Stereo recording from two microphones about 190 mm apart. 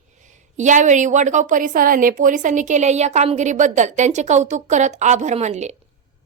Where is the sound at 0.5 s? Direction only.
40° right (ahead or behind).